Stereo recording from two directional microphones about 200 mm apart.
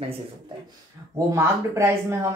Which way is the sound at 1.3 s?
15° right (ahead or behind).